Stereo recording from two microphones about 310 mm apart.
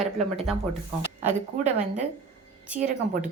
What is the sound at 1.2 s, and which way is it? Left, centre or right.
Speech, right.